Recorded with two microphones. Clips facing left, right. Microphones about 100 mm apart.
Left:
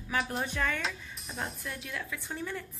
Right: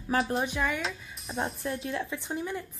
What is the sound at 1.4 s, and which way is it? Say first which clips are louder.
A woman's voice: right 7 dB; 35° right (ahead or behind).